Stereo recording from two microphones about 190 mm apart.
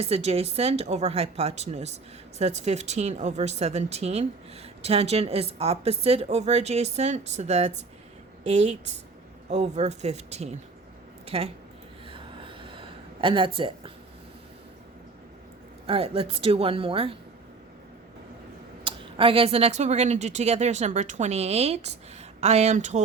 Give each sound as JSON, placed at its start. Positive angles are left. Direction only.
{"t": 0.0, "sound": "speech", "side_deg": -35}
{"t": 12.0, "sound": "a sound", "side_deg": -25}
{"t": 13.6, "sound": "speech", "side_deg": -30}
{"t": 15.9, "sound": "speech", "side_deg": -30}
{"t": 18.9, "sound": "speech", "side_deg": -25}